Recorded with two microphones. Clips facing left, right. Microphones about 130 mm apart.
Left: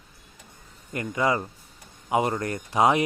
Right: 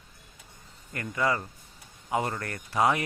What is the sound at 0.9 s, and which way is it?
Speech, 20° left (ahead or behind).